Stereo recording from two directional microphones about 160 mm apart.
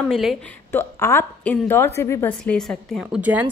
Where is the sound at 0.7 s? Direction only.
15° left (ahead or behind).